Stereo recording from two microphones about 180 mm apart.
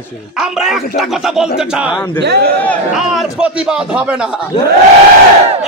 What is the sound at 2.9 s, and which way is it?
Speech, 5° right (ahead or behind).